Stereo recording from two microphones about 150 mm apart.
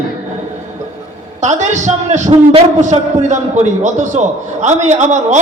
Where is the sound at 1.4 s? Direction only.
50° right (ahead or behind).